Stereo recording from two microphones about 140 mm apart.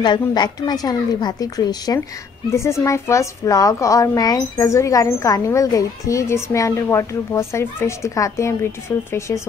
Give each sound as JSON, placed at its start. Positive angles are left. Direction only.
{"t": 0.0, "sound": "a woman's voice", "side_deg": 30}